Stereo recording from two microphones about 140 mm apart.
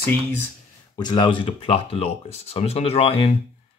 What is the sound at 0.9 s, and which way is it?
Speech, 30° left (ahead or behind).